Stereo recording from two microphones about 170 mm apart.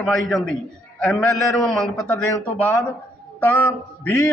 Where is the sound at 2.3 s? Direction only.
20° left (ahead or behind).